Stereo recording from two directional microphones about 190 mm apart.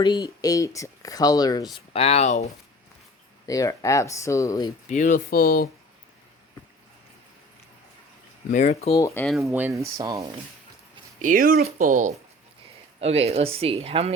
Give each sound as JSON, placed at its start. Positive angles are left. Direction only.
{"t": 0.0, "sound": "speech", "side_deg": 20}
{"t": 1.9, "sound": "speech", "side_deg": 30}
{"t": 3.4, "sound": "speech", "side_deg": 15}
{"t": 4.9, "sound": "speech", "side_deg": 40}
{"t": 8.4, "sound": "speech", "side_deg": 40}
{"t": 9.0, "sound": "speech", "side_deg": 15}
{"t": 9.4, "sound": "speech", "side_deg": -10}
{"t": 11.2, "sound": "speech", "side_deg": -45}